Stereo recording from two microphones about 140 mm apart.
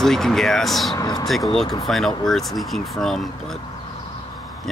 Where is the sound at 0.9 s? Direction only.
25° left (ahead or behind).